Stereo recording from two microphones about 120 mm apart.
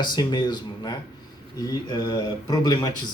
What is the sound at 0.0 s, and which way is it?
Speech, 40° left (ahead or behind).